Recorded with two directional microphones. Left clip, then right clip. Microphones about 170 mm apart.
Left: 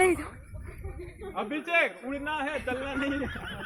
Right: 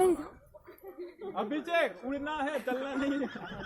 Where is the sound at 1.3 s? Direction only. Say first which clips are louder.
Left 3 dB; 30° left (ahead or behind).